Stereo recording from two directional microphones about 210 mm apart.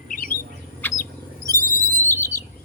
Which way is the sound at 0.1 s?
40° left (ahead or behind).